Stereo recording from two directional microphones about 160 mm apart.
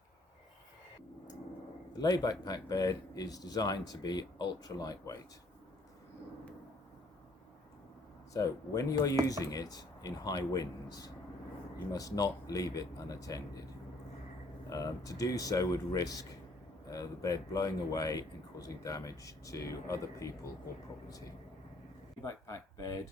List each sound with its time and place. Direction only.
2.0 s speech: 25° left (ahead or behind)
8.3 s speech: 20° left (ahead or behind)
14.7 s speech: 20° left (ahead or behind)
22.2 s speech: 20° left (ahead or behind)